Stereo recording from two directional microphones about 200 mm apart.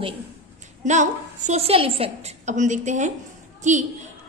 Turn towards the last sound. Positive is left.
turn(degrees=-35)  # may be behind; listen again after turning